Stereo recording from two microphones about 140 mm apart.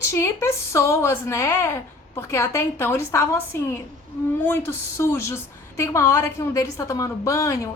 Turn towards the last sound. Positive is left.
turn(degrees=20)  # may be behind; listen again after turning